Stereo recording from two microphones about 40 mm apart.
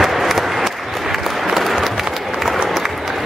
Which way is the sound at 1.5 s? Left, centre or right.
Centre.